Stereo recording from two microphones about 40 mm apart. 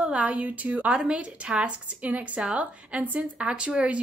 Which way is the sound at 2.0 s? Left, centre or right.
Right.